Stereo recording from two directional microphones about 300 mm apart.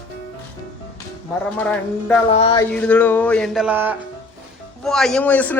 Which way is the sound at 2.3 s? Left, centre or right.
Centre.